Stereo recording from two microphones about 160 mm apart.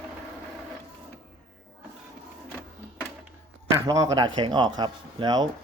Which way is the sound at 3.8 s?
20° right (ahead or behind).